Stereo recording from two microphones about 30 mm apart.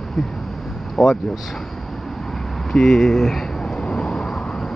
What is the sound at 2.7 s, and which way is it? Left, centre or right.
Speech, centre.